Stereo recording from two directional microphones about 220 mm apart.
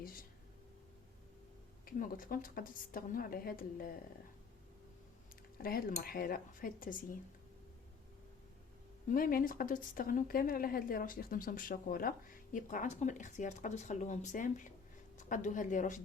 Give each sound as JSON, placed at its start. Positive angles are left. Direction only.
{"t": 0.0, "sound": "a sound", "side_deg": 40}
{"t": 1.8, "sound": "speech", "side_deg": 40}
{"t": 5.6, "sound": "speech", "side_deg": 40}
{"t": 9.0, "sound": "speech", "side_deg": 40}